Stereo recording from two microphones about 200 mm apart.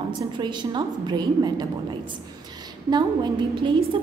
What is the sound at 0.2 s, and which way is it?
A woman's voice, 20° right (ahead or behind).